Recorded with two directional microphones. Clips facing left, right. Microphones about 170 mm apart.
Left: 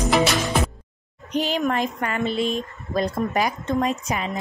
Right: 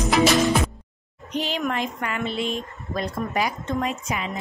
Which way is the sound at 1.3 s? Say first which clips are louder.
Left 3 dB; 45° left (ahead or behind).